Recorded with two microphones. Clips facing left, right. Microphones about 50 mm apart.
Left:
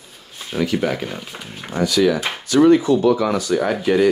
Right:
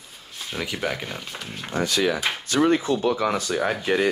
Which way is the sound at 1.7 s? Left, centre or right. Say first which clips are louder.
Left 6 dB; right.